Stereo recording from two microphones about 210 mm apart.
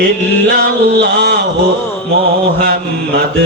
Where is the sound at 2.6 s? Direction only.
45° right (ahead or behind).